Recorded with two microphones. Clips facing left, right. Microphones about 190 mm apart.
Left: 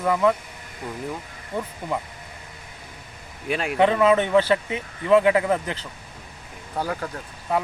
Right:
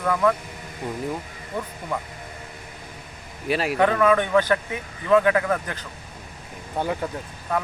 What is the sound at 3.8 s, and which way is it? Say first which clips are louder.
Speech: left 2 dB; 20° left (ahead or behind).